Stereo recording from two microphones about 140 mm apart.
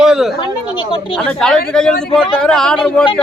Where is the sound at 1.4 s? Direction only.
5° left (ahead or behind).